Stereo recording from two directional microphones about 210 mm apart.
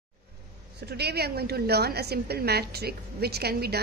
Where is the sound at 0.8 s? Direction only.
50° right (ahead or behind).